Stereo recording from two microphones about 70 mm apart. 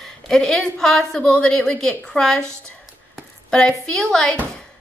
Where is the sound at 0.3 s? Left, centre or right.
Centre.